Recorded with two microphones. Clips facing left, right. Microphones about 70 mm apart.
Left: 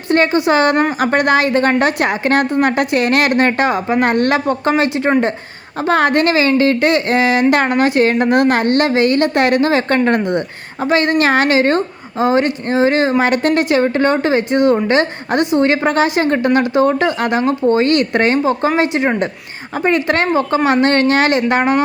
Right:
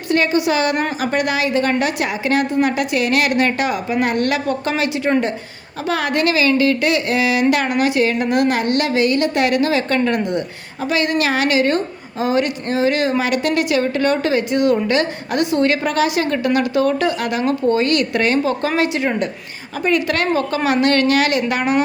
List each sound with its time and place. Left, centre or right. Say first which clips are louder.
0.1 s a woman's voice: left 4 dB; left
5.9 s a woman's voice: left 5 dB; left